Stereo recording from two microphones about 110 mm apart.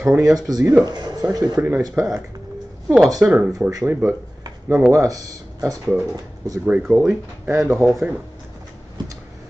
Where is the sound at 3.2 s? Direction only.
15° right (ahead or behind).